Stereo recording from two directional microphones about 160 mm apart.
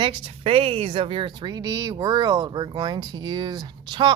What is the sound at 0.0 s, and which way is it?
A woman's voice, 35° right (ahead or behind).